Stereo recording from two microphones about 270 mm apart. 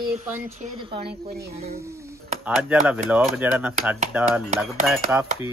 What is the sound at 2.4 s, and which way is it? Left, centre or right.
Speech, centre.